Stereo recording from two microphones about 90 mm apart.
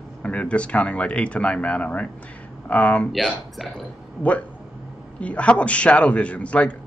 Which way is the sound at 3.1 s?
Centre (ahead or behind).